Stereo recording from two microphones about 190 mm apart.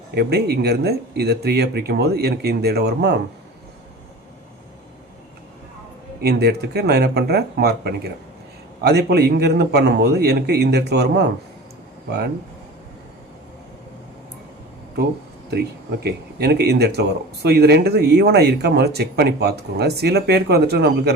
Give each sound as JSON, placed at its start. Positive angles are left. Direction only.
{"t": 0.1, "sound": "speech", "side_deg": -60}
{"t": 6.2, "sound": "speech", "side_deg": -60}
{"t": 16.0, "sound": "speech", "side_deg": -60}